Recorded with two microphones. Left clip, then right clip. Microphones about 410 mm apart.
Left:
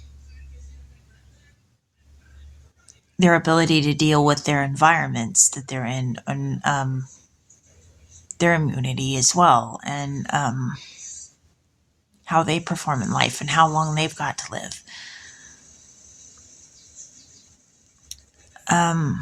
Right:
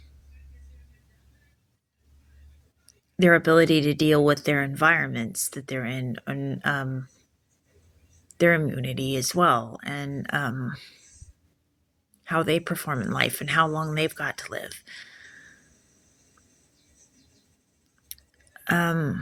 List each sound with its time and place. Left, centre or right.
3.2 s speech: right
8.3 s speech: right
12.2 s speech: right
18.1 s a sound: right